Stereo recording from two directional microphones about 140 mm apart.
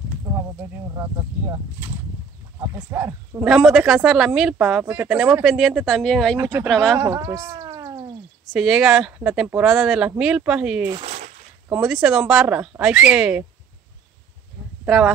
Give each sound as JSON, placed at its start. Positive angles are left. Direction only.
{"t": 0.9, "sound": "speech", "side_deg": -20}
{"t": 3.4, "sound": "speech", "side_deg": 0}
{"t": 6.3, "sound": "speech", "side_deg": -25}
{"t": 6.7, "sound": "speech", "side_deg": 5}
{"t": 7.0, "sound": "speech", "side_deg": -25}
{"t": 8.5, "sound": "speech", "side_deg": -5}
{"t": 14.9, "sound": "speech", "side_deg": -5}